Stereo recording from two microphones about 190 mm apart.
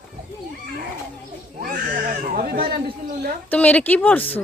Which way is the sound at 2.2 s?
45° right (ahead or behind).